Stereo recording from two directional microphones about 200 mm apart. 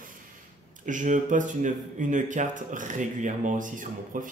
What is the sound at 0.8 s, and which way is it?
Speech, 40° right (ahead or behind).